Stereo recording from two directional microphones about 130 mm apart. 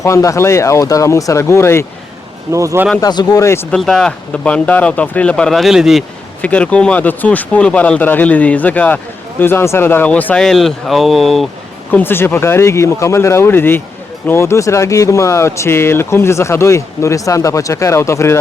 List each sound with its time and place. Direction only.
0.0 s speech: 25° left (ahead or behind)
2.5 s speech: 25° right (ahead or behind)
3.0 s speech: 30° left (ahead or behind)
3.7 s speech: 5° left (ahead or behind)
6.4 s speech: 10° left (ahead or behind)
11.9 s speech: 15° left (ahead or behind)